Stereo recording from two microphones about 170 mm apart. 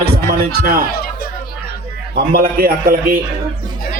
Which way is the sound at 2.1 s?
60° right (ahead or behind).